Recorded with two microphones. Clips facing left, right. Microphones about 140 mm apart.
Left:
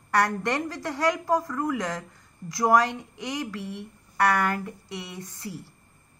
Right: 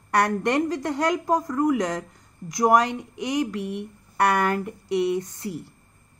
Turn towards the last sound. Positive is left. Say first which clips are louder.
# right 12 dB
turn(degrees=-20)  # may be behind; listen again after turning